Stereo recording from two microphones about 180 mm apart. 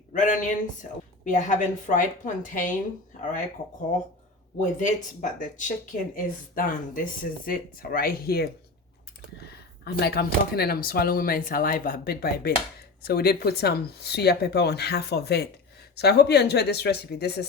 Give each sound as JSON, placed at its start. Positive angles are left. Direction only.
{"t": 0.1, "sound": "speech", "side_deg": 45}
{"t": 4.6, "sound": "speech", "side_deg": 45}
{"t": 9.5, "sound": "speech", "side_deg": 65}